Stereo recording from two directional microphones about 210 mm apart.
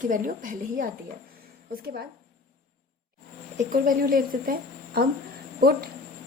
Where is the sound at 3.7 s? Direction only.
45° right (ahead or behind).